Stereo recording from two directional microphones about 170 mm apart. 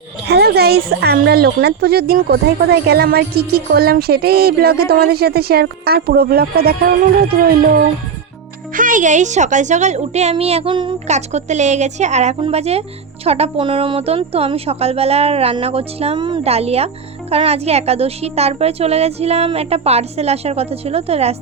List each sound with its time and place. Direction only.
0.3 s speech: 70° right (ahead or behind)
8.7 s a woman's voice: 50° right (ahead or behind); by 10.9 s 30° right (ahead or behind)
11.1 s a woman's voice: 40° right (ahead or behind)